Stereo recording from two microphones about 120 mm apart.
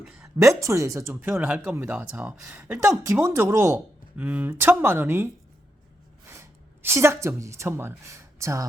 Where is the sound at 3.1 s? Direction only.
25° right (ahead or behind).